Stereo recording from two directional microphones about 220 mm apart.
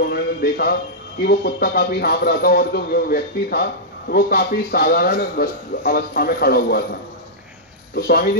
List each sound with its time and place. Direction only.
0.0 s a man's voice: 45° left (ahead or behind)
7.9 s speech: 45° left (ahead or behind)